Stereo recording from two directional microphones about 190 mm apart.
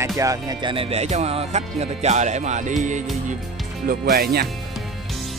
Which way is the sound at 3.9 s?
50° right (ahead or behind).